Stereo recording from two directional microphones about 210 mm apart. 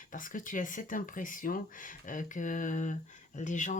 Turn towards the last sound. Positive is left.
turn(degrees=35)  # may be behind; listen again after turning